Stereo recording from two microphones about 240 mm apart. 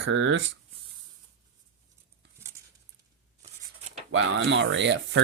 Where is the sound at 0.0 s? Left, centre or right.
Right.